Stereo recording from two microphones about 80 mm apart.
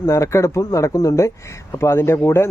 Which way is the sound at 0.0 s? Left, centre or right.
Left.